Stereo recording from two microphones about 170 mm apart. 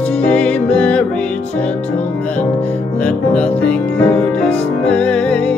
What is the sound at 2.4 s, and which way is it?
Music, 40° left (ahead or behind).